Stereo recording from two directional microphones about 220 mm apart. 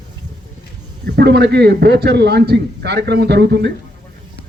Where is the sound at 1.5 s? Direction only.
50° right (ahead or behind).